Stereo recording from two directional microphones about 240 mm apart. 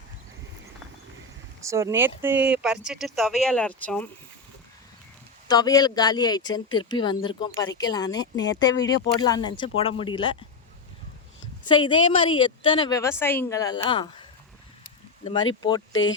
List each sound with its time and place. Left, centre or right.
1.6 s speech: centre
5.5 s speech: centre
8.4 s speech: left
9.2 s a woman's voice: centre
11.7 s a woman's voice: centre